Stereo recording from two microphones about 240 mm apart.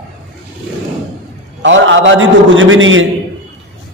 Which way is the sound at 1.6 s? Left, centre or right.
Right.